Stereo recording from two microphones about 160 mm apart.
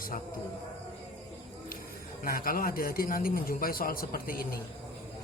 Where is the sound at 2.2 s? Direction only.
65° left (ahead or behind).